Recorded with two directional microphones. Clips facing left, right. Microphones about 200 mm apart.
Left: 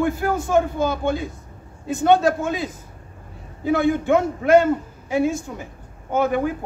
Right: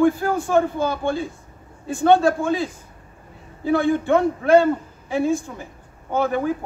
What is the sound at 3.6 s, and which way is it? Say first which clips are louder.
Speech: even; 15° left (ahead or behind).